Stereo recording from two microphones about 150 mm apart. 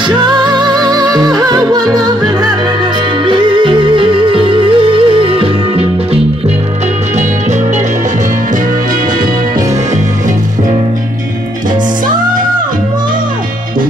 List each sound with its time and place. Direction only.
0.0 s music: 30° right (ahead or behind)